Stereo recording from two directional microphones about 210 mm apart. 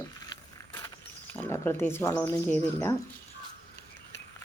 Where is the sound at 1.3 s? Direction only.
10° left (ahead or behind).